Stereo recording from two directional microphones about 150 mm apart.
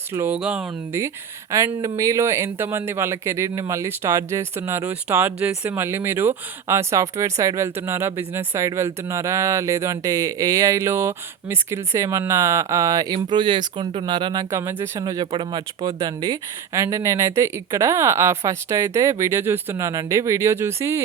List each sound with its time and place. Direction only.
0.1 s speech: 15° right (ahead or behind)
0.9 s speech: 20° right (ahead or behind)
14.5 s speech: 15° right (ahead or behind)